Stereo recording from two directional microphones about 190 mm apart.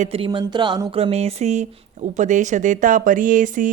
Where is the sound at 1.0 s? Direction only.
35° right (ahead or behind).